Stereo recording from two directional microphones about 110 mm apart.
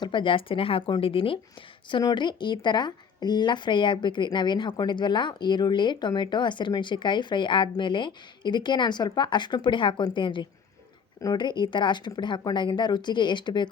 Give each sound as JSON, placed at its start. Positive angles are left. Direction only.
{"t": 0.0, "sound": "speech", "side_deg": 45}